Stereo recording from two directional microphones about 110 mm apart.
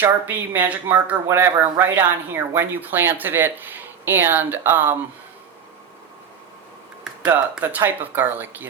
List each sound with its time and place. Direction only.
0.0 s a woman's voice: 15° right (ahead or behind)
7.6 s a woman's voice: 20° right (ahead or behind)